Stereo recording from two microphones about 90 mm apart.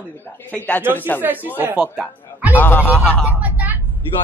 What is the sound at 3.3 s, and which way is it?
Vehicle, 20° right (ahead or behind).